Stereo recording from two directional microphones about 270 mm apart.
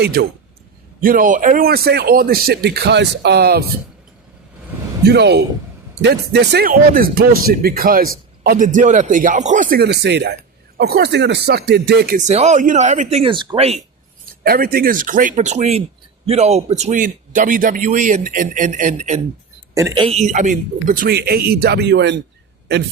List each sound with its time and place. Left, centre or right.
0.0 s speech: right
5.0 s speech: right; by 13.7 s centre
14.4 s speech: right
19.7 s speech: centre; by 22.2 s right